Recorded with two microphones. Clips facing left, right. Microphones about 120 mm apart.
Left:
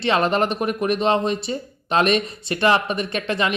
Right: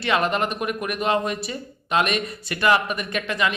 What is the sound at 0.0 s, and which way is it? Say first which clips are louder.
Speech: left 3 dB; 30° left (ahead or behind).